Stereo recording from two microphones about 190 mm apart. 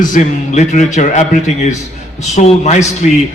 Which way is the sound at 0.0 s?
40° left (ahead or behind).